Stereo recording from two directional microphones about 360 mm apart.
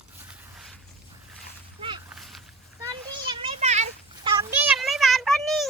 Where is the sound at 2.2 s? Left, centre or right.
Centre.